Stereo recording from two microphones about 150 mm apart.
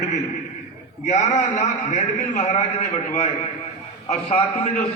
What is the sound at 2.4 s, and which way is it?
A man's voice, 50° left (ahead or behind).